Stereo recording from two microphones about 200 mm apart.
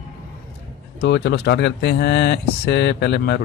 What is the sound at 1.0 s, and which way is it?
Speech, 60° left (ahead or behind).